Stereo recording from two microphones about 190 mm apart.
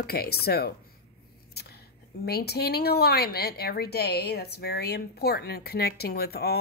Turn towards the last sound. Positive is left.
turn(degrees=55)  # may be behind; listen again after turning